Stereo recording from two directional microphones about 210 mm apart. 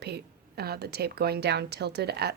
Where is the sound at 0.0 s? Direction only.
50° right (ahead or behind).